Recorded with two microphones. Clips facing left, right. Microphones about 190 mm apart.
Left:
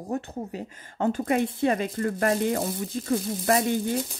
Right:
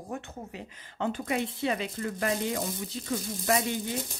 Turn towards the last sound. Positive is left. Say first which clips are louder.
# left 5 dB
turn(degrees=45)  # may be behind; listen again after turning